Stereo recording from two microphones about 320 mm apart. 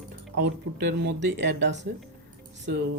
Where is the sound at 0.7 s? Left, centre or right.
Right.